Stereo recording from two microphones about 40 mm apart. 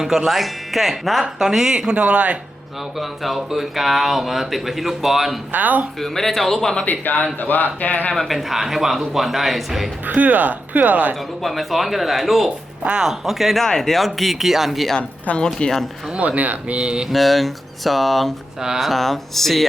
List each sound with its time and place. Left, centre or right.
0.0 s speech: centre
1.9 s speech: right
3.0 s speech: centre
5.5 s speech: right
6.0 s speech: centre
7.0 s speech: left
8.1 s speech: centre
10.1 s speech: right
11.4 s speech: centre
13.7 s speech: centre
15.4 s speech: centre
16.1 s speech: right
17.1 s speech: centre